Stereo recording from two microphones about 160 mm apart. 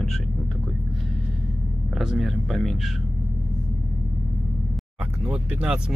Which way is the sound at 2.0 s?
Centre (ahead or behind).